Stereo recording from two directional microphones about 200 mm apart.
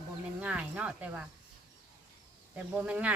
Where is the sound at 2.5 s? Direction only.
5° right (ahead or behind).